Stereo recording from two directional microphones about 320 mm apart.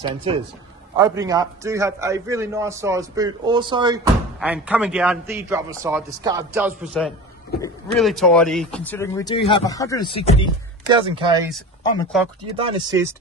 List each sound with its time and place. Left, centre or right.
0.0 s a man's voice: centre
10.9 s a man's voice: centre
12.1 s a man's voice: centre
12.5 s a man's voice: centre